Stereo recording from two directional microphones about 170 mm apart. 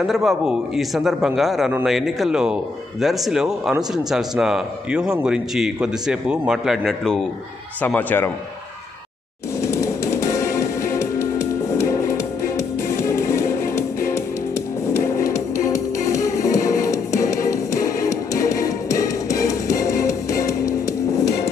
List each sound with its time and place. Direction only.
0.0 s speech: centre (ahead or behind)
9.6 s music: 15° left (ahead or behind)